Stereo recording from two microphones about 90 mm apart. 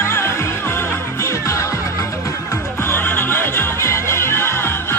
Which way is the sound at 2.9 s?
25° left (ahead or behind).